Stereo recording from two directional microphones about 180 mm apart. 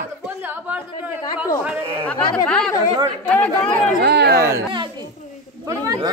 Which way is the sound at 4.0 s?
65° right (ahead or behind).